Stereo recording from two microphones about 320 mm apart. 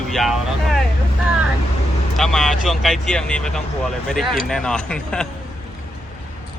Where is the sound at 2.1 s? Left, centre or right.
Centre.